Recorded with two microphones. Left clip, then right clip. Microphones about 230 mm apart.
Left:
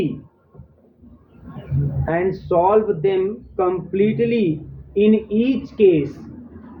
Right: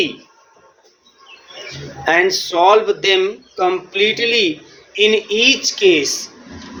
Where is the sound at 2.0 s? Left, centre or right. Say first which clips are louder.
Right 7 dB; right.